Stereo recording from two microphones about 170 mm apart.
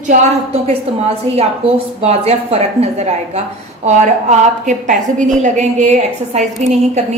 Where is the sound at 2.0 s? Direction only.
35° right (ahead or behind).